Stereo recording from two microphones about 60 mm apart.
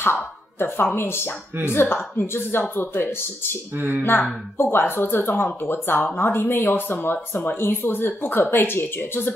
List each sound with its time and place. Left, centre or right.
0.0 s a sound: left
0.9 s speech: left
3.7 s speech: right
4.0 s speech: left